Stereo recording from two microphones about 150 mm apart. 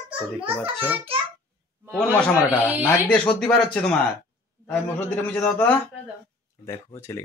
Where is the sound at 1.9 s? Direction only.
5° left (ahead or behind).